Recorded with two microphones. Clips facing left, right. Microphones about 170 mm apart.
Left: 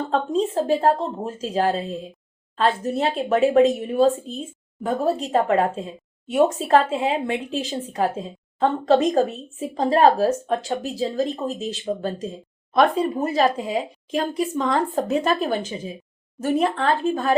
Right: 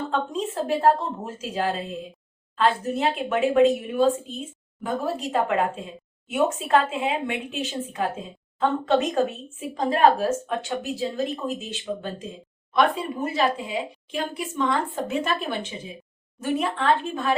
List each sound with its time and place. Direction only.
0.1 s speech: 35° left (ahead or behind)